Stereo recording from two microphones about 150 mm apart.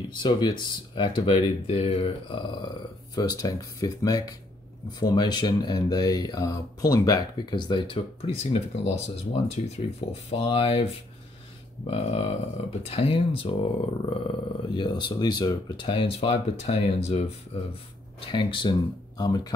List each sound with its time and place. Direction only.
0.2 s speech: 30° left (ahead or behind)
18.3 s speech: 35° left (ahead or behind)